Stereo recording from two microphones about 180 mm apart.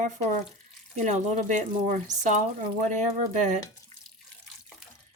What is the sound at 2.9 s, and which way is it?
Speech, 40° right (ahead or behind).